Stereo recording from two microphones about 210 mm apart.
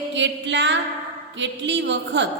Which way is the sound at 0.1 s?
60° right (ahead or behind).